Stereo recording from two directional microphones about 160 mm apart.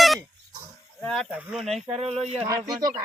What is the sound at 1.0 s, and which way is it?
Speech, centre (ahead or behind).